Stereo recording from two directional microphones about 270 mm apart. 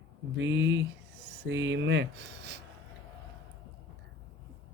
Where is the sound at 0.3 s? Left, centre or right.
Right.